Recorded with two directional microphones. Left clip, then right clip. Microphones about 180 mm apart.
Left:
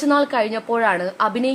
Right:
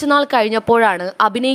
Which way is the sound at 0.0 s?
40° right (ahead or behind).